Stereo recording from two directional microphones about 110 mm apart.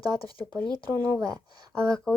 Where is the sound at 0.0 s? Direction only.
35° right (ahead or behind).